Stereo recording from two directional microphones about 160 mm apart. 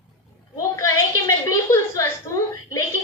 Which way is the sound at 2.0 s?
20° left (ahead or behind).